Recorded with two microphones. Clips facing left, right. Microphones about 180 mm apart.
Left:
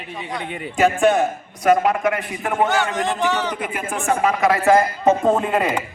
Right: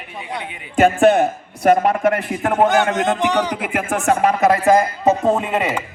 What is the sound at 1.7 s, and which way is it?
Speech, 50° right (ahead or behind).